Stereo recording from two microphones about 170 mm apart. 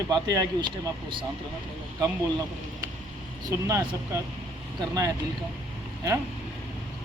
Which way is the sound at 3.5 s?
20° right (ahead or behind).